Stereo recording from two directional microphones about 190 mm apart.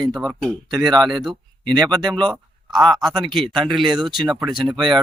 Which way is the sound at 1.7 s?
20° right (ahead or behind).